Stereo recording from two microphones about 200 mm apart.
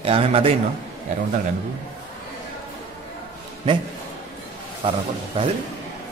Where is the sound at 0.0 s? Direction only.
30° right (ahead or behind).